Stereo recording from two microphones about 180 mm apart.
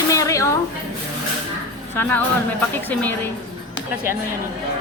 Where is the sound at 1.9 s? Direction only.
10° left (ahead or behind).